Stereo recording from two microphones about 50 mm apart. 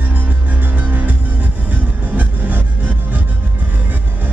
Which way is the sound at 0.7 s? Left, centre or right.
Right.